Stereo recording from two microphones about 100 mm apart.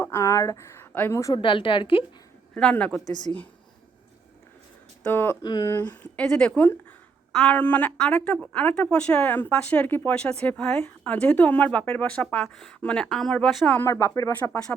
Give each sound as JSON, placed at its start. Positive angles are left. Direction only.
{"t": 0.0, "sound": "speech", "side_deg": 30}
{"t": 1.3, "sound": "a woman's voice", "side_deg": 55}
{"t": 2.6, "sound": "a woman's voice", "side_deg": 10}
{"t": 3.0, "sound": "speech", "side_deg": 45}
{"t": 5.0, "sound": "speech", "side_deg": 25}
{"t": 5.4, "sound": "speech", "side_deg": 45}
{"t": 5.7, "sound": "a woman's voice", "side_deg": 15}
{"t": 13.7, "sound": "a woman's voice", "side_deg": 15}
{"t": 13.9, "sound": "speech", "side_deg": 30}